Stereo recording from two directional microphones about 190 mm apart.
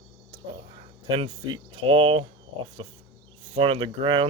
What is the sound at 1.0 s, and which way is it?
Speech, 25° right (ahead or behind).